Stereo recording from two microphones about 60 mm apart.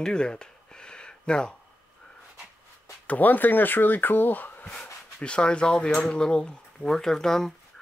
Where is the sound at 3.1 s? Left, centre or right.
Left.